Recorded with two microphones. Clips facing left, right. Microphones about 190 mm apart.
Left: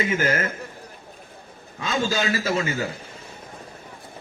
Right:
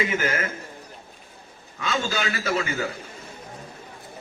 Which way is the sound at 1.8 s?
35° left (ahead or behind).